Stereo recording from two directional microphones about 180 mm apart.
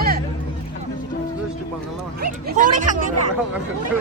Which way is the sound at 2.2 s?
45° right (ahead or behind).